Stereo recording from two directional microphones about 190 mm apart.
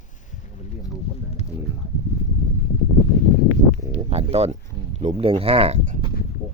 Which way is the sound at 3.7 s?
35° right (ahead or behind).